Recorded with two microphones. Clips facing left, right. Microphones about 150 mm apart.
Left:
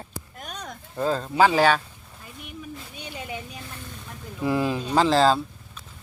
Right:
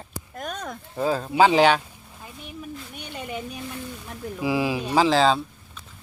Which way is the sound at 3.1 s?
75° right (ahead or behind).